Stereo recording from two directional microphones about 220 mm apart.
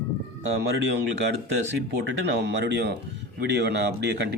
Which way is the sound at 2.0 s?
50° right (ahead or behind).